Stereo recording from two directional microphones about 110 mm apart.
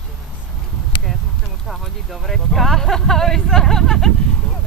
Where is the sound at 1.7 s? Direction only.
Centre (ahead or behind).